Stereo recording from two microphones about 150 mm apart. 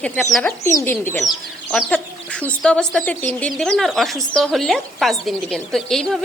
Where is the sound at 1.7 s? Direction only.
Centre (ahead or behind).